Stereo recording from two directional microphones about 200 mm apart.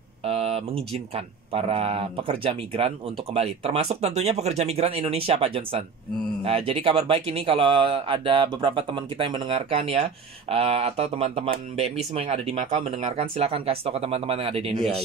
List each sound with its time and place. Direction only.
0.2 s speech: 30° right (ahead or behind)